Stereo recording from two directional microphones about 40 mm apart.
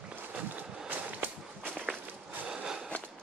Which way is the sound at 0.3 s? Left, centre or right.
Right.